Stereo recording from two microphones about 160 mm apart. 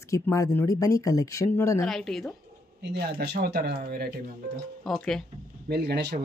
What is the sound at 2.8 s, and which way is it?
Speech, 90° right.